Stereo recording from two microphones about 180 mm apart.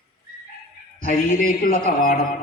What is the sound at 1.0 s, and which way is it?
Speech, 50° left (ahead or behind).